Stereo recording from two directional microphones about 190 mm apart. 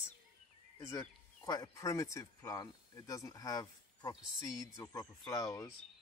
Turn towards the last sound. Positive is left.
turn(degrees=15)  # may be behind; listen again after turning